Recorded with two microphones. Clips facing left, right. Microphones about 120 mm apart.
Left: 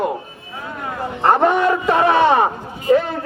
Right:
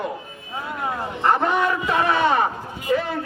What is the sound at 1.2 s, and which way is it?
A man's voice, 45° left (ahead or behind).